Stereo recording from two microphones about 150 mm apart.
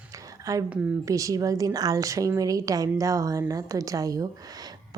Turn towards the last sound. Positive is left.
turn(degrees=-25)  # may be behind; listen again after turning